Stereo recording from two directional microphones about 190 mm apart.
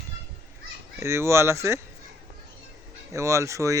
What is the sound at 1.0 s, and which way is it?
Speech, 15° right (ahead or behind).